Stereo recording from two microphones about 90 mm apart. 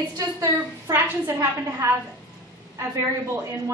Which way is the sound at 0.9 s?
25° right (ahead or behind).